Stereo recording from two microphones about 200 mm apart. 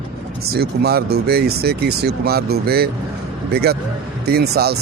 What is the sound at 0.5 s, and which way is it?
Speech, 50° right (ahead or behind).